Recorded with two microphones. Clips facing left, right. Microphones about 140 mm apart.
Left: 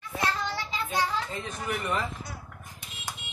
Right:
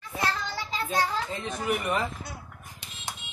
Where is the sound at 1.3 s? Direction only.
20° right (ahead or behind).